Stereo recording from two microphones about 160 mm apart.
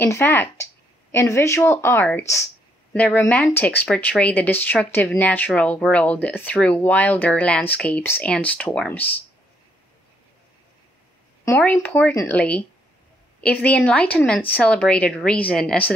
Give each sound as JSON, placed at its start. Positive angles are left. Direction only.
{"t": 0.0, "sound": "speech", "side_deg": 15}
{"t": 11.4, "sound": "speech", "side_deg": 15}